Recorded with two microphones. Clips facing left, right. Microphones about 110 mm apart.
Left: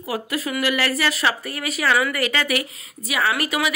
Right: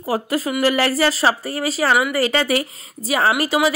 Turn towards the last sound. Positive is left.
turn(degrees=-30)  # may be behind; listen again after turning